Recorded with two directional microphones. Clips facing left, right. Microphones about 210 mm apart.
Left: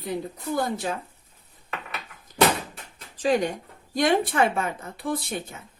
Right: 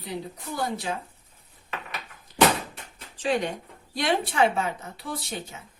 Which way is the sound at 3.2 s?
40° left (ahead or behind).